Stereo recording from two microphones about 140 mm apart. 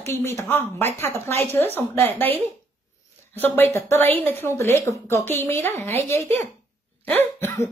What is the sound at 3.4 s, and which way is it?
A woman's voice, 15° left (ahead or behind).